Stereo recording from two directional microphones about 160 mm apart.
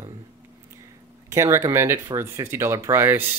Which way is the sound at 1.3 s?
15° right (ahead or behind).